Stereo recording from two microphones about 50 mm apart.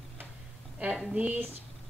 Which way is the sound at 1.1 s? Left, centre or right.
Right.